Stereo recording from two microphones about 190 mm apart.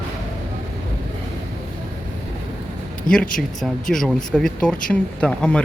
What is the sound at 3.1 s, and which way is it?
Speech, 45° left (ahead or behind).